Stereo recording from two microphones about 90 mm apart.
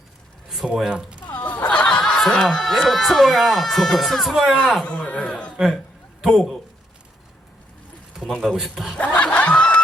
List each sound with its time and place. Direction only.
0.4 s speech: 5° right (ahead or behind)
1.3 s a man's voice: 20° left (ahead or behind)
5.5 s a man's voice: centre (ahead or behind)
8.4 s a man's voice: centre (ahead or behind)
9.0 s snicker: 15° left (ahead or behind)